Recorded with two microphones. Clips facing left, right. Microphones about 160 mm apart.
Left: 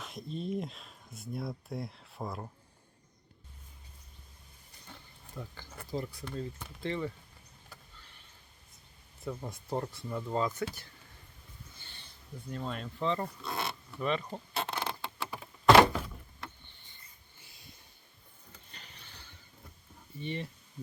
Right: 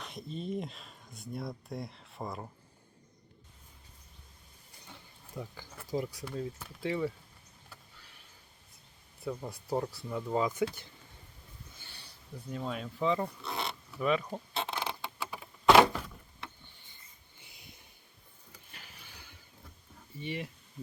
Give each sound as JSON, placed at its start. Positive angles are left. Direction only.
{"t": 0.0, "sound": "speech", "side_deg": 0}
{"t": 4.9, "sound": "a sound", "side_deg": -10}
{"t": 6.1, "sound": "speech", "side_deg": -10}
{"t": 9.2, "sound": "speech", "side_deg": -5}
{"t": 11.8, "sound": "a sound", "side_deg": -10}
{"t": 12.5, "sound": "oink", "side_deg": -5}
{"t": 17.4, "sound": "a sound", "side_deg": -20}
{"t": 18.5, "sound": "mechanisms", "side_deg": -5}
{"t": 20.2, "sound": "speech", "side_deg": -10}